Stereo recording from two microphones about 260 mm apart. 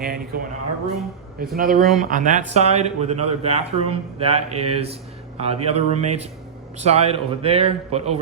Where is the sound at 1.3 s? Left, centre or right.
Right.